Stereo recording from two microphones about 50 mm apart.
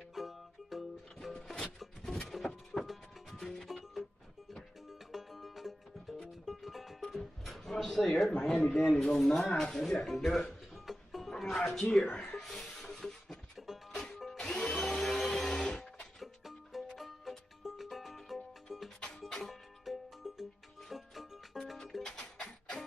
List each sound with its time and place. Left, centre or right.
0.1 s music: centre
1.3 s music: centre
2.3 s music: centre
3.6 s music: centre
5.1 s music: centre
8.7 s speech: centre
10.7 s music: centre
11.9 s speech: centre
12.4 s a sound: centre
13.9 s music: centre
16.2 s music: centre
18.9 s music: centre
19.4 s music: centre